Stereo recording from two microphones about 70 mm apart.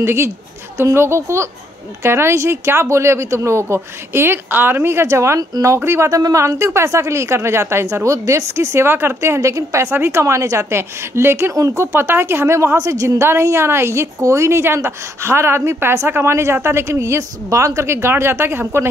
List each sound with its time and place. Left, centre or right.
0.0 s a woman's voice: right
6.0 s a woman's voice: right
11.5 s speech: right
11.8 s a woman's voice: right
12.7 s a woman's voice: right